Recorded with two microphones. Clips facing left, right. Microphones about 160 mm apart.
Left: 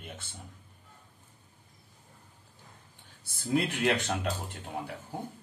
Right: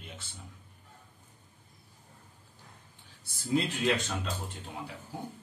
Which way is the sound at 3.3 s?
55° left (ahead or behind).